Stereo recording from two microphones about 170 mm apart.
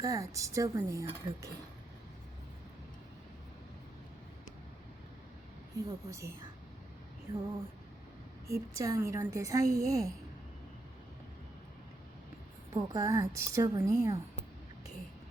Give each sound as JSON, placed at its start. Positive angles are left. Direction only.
{"t": 0.0, "sound": "a woman's voice", "side_deg": -20}
{"t": 5.7, "sound": "a woman's voice", "side_deg": -20}
{"t": 8.4, "sound": "a woman's voice", "side_deg": -20}
{"t": 12.7, "sound": "a woman's voice", "side_deg": -20}